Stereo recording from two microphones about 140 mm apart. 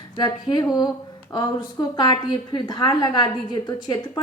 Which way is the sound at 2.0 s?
30° left (ahead or behind).